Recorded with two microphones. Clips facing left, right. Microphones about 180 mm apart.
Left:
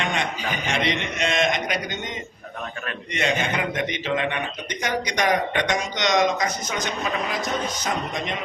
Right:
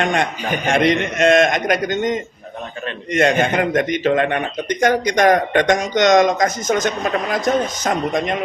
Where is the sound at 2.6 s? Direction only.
25° right (ahead or behind).